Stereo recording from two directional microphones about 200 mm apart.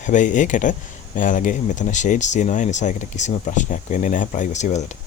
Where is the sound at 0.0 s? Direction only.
40° left (ahead or behind).